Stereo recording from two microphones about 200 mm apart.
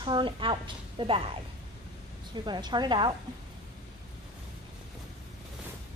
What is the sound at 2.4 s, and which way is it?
Speech, 20° right (ahead or behind).